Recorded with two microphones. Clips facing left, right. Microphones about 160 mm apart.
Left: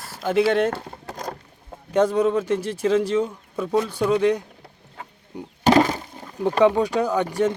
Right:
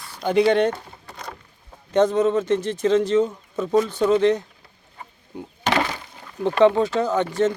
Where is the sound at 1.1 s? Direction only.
45° left (ahead or behind).